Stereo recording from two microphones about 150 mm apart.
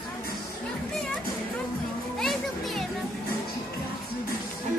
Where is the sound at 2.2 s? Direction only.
Centre (ahead or behind).